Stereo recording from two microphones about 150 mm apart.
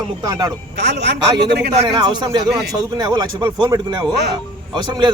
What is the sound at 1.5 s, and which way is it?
Speech, 90° right.